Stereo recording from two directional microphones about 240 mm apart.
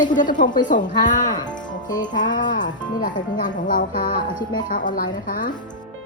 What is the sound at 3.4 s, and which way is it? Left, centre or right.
Music, left.